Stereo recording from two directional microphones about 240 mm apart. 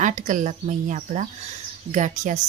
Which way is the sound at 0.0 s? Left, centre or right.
Right.